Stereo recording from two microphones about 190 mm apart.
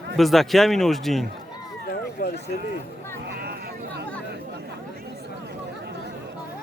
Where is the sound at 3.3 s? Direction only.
55° right (ahead or behind).